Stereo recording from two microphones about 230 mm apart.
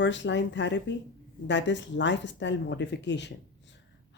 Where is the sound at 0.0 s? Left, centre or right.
Left.